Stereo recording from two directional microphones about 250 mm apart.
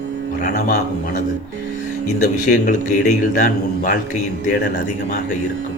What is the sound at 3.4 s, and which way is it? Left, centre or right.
Speech, left.